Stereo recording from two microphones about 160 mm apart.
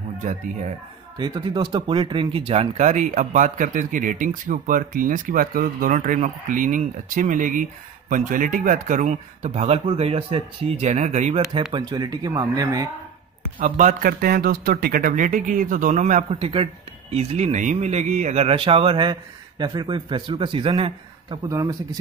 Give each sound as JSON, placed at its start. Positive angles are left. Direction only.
{"t": 0.2, "sound": "speech", "side_deg": -50}
{"t": 1.1, "sound": "speech", "side_deg": -25}
{"t": 11.7, "sound": "speech", "side_deg": -25}
{"t": 13.6, "sound": "speech", "side_deg": -55}
{"t": 14.2, "sound": "speech", "side_deg": -70}
{"t": 16.3, "sound": "a man's voice", "side_deg": -35}